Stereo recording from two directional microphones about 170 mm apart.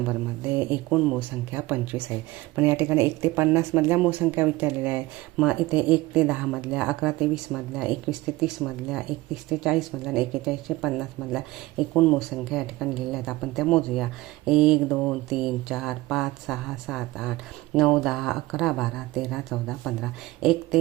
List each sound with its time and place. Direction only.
0.1 s speech: 10° right (ahead or behind)